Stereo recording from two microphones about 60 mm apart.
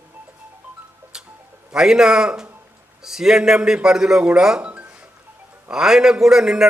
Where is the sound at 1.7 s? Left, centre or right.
Centre.